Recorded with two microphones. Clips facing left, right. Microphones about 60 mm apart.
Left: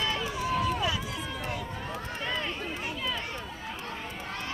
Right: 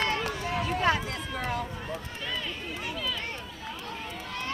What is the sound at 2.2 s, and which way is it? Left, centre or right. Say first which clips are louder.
Run: left 3 dB; left.